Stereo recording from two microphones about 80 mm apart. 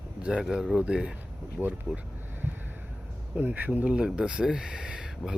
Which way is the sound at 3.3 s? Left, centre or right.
Right.